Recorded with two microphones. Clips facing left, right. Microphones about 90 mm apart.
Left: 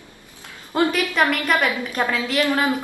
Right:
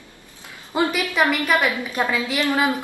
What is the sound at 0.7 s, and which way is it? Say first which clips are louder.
A woman's voice: left 1 dB; 5° right (ahead or behind).